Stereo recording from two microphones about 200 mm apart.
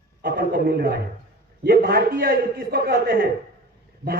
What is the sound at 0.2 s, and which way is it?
A man's voice, 45° right (ahead or behind).